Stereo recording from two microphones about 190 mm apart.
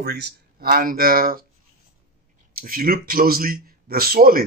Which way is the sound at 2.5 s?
50° right (ahead or behind).